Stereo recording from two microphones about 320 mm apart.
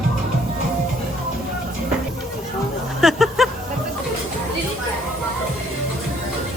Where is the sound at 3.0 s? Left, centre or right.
Centre.